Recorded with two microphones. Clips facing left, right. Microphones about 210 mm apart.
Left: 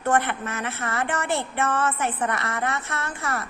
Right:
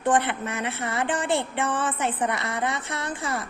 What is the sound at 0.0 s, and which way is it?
Speech, 15° right (ahead or behind).